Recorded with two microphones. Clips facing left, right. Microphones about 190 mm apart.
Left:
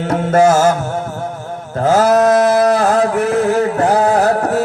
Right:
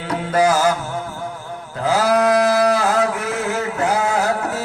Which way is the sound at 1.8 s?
50° left (ahead or behind).